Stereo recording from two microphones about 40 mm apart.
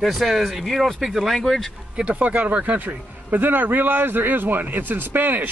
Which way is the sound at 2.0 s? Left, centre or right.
Right.